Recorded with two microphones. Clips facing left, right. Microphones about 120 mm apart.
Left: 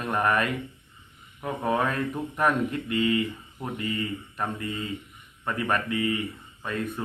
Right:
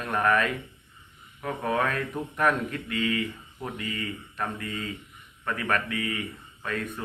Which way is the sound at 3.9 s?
15° left (ahead or behind).